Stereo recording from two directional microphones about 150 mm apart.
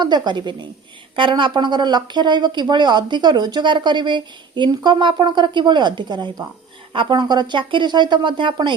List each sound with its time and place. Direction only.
0.0 s speech: 30° right (ahead or behind)